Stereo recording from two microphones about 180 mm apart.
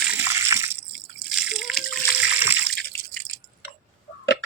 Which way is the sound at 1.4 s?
5° right (ahead or behind).